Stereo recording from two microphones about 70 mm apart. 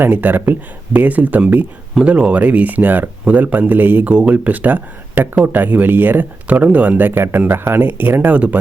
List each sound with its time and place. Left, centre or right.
0.0 s speech: right
4.1 s speech: centre